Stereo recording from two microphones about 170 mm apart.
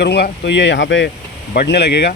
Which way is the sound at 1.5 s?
70° left (ahead or behind).